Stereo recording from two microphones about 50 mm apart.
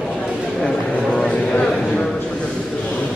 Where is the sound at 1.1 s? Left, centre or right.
Centre.